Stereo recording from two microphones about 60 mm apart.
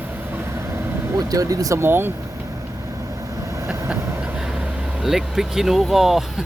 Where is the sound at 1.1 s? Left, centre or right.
Right.